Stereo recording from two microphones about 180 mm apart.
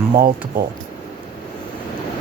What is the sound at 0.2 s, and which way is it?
Speech, 55° right (ahead or behind).